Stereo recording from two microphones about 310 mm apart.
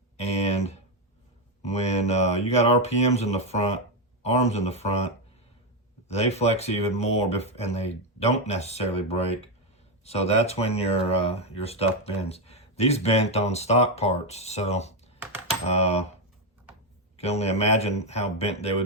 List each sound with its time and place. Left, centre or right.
0.2 s a sound: left
1.6 s mantra: left
2.5 s speech: left
6.1 s speech: left
17.2 s speech: centre